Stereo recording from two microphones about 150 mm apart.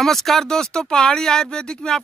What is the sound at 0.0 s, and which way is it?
Speech, centre (ahead or behind).